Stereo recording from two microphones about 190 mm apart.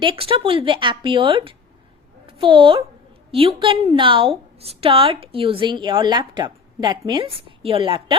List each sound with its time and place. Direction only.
0.0 s a woman's voice: 30° right (ahead or behind)